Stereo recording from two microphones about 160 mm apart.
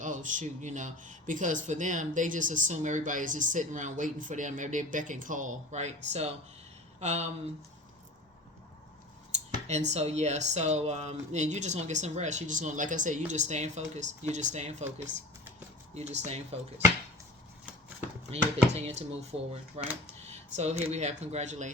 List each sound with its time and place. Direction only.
0.0 s speech: 55° right (ahead or behind)
9.3 s a sound: 45° right (ahead or behind)
9.9 s speech: 45° right (ahead or behind)
16.0 s speech: 45° right (ahead or behind)
18.3 s speech: 40° right (ahead or behind)
20.2 s a sound: 45° right (ahead or behind)
20.9 s speech: 45° right (ahead or behind)